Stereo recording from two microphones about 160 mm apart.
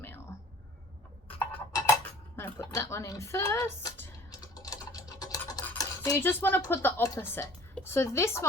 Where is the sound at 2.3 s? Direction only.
15° left (ahead or behind).